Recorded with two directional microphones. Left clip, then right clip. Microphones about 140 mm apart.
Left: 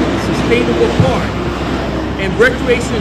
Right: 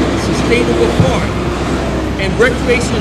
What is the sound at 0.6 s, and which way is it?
Vehicle, 35° right (ahead or behind).